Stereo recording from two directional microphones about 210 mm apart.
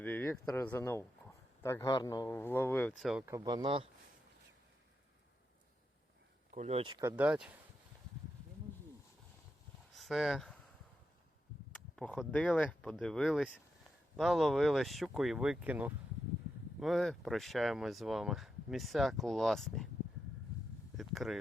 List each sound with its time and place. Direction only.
0.0 s speech: 10° left (ahead or behind)
3.1 s speech: 10° right (ahead or behind)
6.5 s speech: 35° right (ahead or behind)
7.2 s speech: 5° right (ahead or behind)
9.9 s speech: centre (ahead or behind)
11.9 s speech: 5° left (ahead or behind)
20.9 s a sound: centre (ahead or behind)